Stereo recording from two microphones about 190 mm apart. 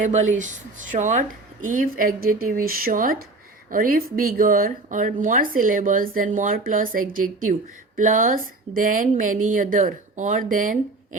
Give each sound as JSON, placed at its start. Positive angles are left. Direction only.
{"t": 0.0, "sound": "speech", "side_deg": -40}